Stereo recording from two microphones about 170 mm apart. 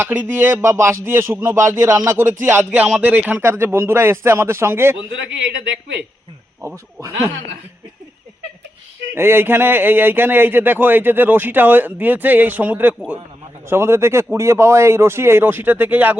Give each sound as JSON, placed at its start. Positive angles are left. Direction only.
{"t": 0.0, "sound": "speech", "side_deg": -15}
{"t": 9.1, "sound": "speech", "side_deg": -15}